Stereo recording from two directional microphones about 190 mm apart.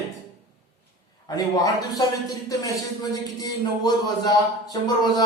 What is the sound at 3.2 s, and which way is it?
Speech, 20° left (ahead or behind).